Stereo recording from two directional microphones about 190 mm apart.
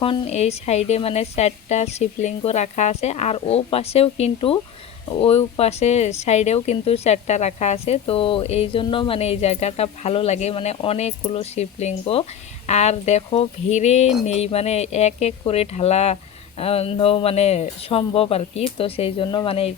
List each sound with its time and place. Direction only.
0.0 s speech: 30° left (ahead or behind)